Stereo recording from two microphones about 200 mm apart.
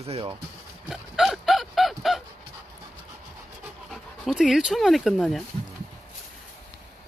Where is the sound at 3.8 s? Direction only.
Centre (ahead or behind).